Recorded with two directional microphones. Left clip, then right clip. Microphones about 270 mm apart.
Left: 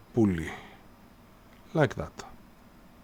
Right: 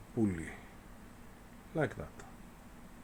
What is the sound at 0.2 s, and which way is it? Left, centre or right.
Speech, left.